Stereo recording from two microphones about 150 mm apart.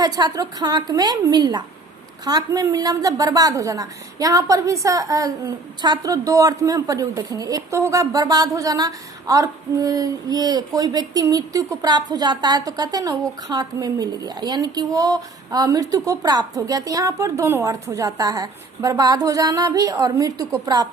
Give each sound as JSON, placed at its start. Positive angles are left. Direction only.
{"t": 0.0, "sound": "a woman's voice", "side_deg": -25}